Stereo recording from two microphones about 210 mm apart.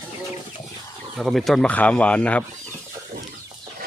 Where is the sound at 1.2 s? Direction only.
Centre (ahead or behind).